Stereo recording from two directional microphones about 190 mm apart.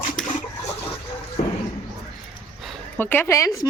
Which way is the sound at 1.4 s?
50° left (ahead or behind).